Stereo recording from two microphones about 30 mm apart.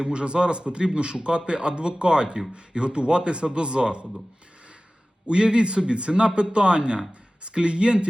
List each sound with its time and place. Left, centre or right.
0.0 s speech: right
5.3 s speech: right